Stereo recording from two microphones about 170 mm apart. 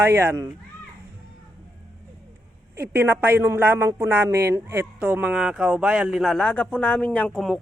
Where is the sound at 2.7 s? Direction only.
15° right (ahead or behind).